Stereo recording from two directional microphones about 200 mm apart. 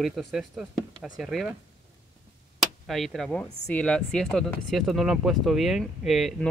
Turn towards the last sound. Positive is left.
turn(degrees=0)  # may be behind; listen again after turning